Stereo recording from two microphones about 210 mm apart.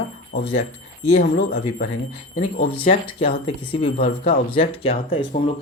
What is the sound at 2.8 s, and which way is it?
Speech, 25° left (ahead or behind).